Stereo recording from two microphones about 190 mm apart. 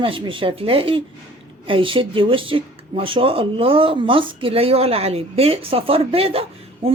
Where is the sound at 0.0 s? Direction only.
25° right (ahead or behind).